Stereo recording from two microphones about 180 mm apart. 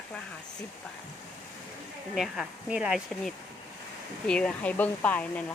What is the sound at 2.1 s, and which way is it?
Speech, centre (ahead or behind).